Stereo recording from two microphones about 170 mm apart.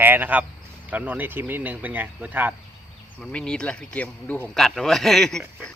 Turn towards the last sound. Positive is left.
turn(degrees=0)  # may be behind; listen again after turning